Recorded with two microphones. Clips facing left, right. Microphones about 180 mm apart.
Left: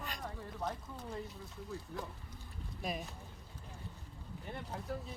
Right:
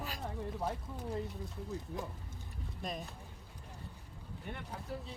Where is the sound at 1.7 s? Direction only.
20° right (ahead or behind).